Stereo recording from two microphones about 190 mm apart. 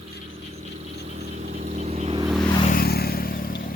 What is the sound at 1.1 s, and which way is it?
Vehicle, 35° right (ahead or behind).